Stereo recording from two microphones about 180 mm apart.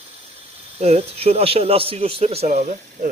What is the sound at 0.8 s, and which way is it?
A man's voice, 35° right (ahead or behind).